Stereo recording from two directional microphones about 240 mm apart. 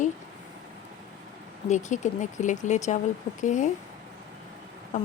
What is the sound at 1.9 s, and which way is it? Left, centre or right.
A woman's voice, left.